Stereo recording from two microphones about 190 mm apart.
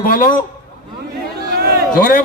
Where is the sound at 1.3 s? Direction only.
55° right (ahead or behind).